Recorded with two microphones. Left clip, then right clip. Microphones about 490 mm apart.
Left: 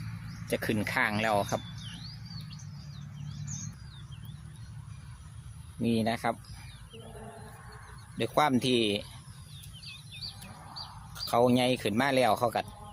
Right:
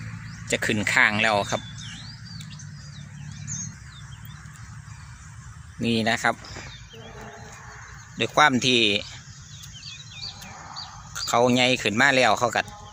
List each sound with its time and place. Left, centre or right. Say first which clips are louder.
0.4 s speech: right 7 dB; left
5.8 s speech: right 7 dB; left
8.2 s speech: right 8 dB; left
11.1 s speech: right 5 dB; left